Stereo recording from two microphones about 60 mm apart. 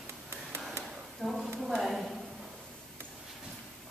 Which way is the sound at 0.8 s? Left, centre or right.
Centre.